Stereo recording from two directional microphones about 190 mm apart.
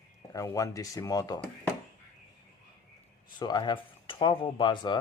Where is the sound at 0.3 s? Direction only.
15° left (ahead or behind).